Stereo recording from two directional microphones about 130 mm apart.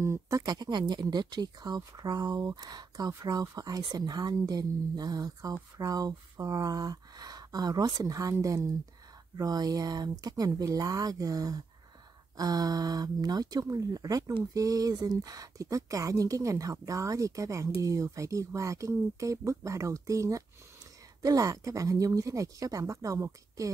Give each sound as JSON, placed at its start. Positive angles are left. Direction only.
{"t": 0.0, "sound": "speech", "side_deg": -25}